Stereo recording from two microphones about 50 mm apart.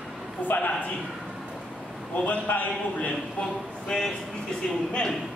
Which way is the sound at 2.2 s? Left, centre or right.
Left.